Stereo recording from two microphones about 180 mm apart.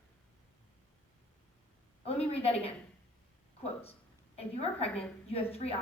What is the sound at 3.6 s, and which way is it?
Speech, 35° left (ahead or behind).